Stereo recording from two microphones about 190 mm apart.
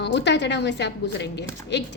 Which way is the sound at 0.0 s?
65° left (ahead or behind).